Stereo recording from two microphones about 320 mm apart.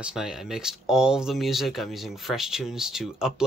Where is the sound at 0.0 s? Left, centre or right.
Centre.